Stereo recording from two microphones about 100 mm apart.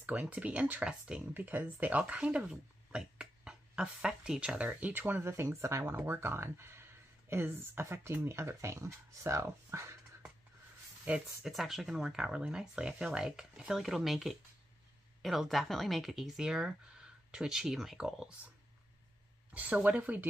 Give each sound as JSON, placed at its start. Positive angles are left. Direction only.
{"t": 0.0, "sound": "speech", "side_deg": -15}
{"t": 1.3, "sound": "speech", "side_deg": -20}
{"t": 11.1, "sound": "speech", "side_deg": -15}
{"t": 11.4, "sound": "speech", "side_deg": 0}
{"t": 19.5, "sound": "speech", "side_deg": -15}